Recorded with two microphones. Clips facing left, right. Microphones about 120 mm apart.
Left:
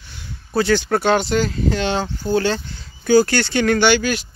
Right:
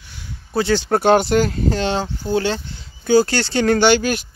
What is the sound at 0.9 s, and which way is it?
Speech, 45° right (ahead or behind).